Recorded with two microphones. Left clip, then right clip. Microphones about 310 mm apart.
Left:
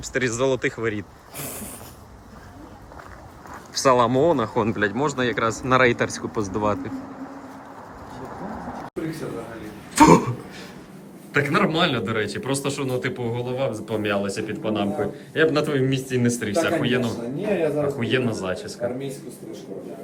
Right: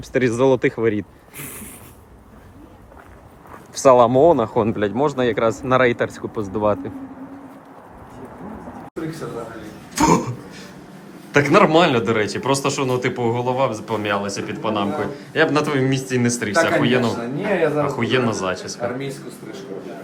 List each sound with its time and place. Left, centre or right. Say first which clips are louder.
0.0 s speech: right 5 dB; centre
3.8 s a man's voice: right 6 dB; centre
9.9 s a sound: left 3 dB; centre
11.3 s a man's voice: right 7 dB; centre